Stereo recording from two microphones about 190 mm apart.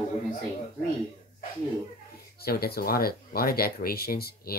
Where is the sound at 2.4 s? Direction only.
55° left (ahead or behind).